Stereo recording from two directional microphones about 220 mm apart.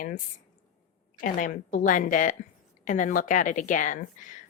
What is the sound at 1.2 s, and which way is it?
Speech, 40° left (ahead or behind).